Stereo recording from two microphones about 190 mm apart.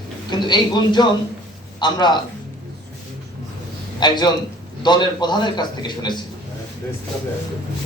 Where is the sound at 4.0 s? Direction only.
25° left (ahead or behind).